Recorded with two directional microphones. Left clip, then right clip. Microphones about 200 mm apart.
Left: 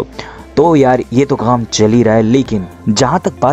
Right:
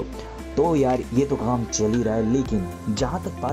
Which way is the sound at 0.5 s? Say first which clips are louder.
Left 11 dB; 15° left (ahead or behind).